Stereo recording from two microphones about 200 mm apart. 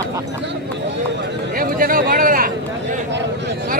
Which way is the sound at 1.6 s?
45° right (ahead or behind).